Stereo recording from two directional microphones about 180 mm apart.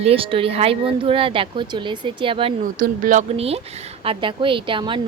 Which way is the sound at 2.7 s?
50° right (ahead or behind).